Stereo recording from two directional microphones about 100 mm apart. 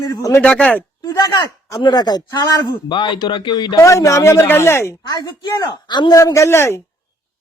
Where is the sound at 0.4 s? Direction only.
10° left (ahead or behind).